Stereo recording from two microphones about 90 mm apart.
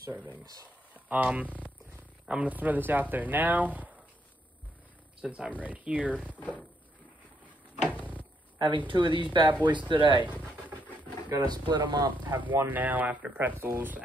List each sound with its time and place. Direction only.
0.1 s speech: 20° right (ahead or behind)
5.2 s speech: 15° right (ahead or behind)
6.3 s speech: 15° left (ahead or behind)
8.5 s speech: 60° right (ahead or behind)
11.3 s speech: 45° right (ahead or behind)
12.4 s speech: 20° right (ahead or behind)